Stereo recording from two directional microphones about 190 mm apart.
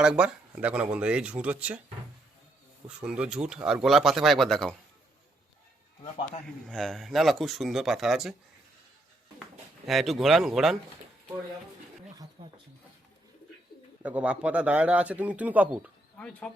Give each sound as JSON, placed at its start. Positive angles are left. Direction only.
{"t": 0.0, "sound": "a man's voice", "side_deg": -5}
{"t": 2.8, "sound": "speech", "side_deg": -5}
{"t": 6.7, "sound": "speech", "side_deg": 0}
{"t": 9.8, "sound": "speech", "side_deg": 0}
{"t": 12.4, "sound": "a sound", "side_deg": -20}
{"t": 14.0, "sound": "a man's voice", "side_deg": -10}
{"t": 16.1, "sound": "speech", "side_deg": 5}